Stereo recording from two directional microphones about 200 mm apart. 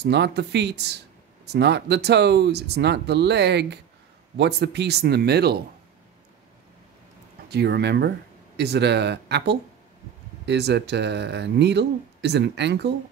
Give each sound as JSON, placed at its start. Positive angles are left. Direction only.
{"t": 0.0, "sound": "speech", "side_deg": -55}
{"t": 7.4, "sound": "speech", "side_deg": -55}